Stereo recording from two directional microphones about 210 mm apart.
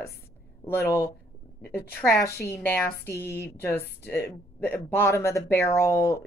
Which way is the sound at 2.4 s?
10° left (ahead or behind).